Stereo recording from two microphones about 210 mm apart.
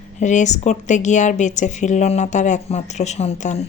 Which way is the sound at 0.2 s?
35° left (ahead or behind).